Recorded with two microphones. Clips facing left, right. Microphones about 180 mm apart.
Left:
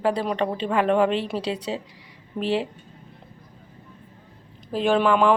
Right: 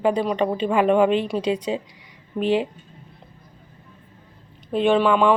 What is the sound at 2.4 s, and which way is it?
Speech, 30° left (ahead or behind).